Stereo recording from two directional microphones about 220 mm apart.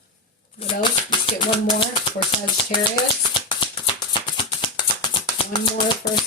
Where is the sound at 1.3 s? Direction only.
25° left (ahead or behind).